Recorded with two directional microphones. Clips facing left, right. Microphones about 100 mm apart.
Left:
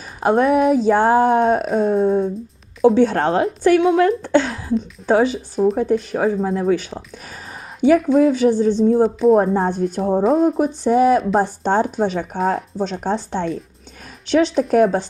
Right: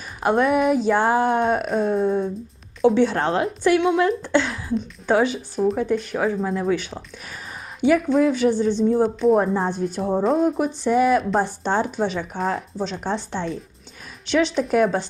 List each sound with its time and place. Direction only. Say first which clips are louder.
0.2 s speech: left 3 dB; 35° left (ahead or behind)
1.6 s wail: left 4 dB; 5° left (ahead or behind)
2.0 s speech: left 4 dB; 30° left (ahead or behind)
2.8 s speech: left 4 dB; 40° left (ahead or behind)
8.0 s wail: left 4 dB; 5° left (ahead or behind)
8.4 s speech: left 4 dB; 40° left (ahead or behind)
9.0 s wail: left 4 dB; centre (ahead or behind)
9.4 s speech: left 4 dB; 40° left (ahead or behind)
10.2 s wail: left 4 dB; centre (ahead or behind)
10.6 s speech: left 4 dB; 35° left (ahead or behind)